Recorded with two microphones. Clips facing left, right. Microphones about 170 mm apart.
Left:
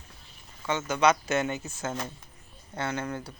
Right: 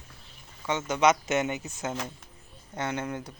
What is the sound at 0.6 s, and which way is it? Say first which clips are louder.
A man's voice: even; 20° right (ahead or behind).